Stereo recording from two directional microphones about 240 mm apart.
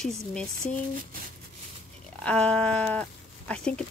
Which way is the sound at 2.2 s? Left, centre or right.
Centre.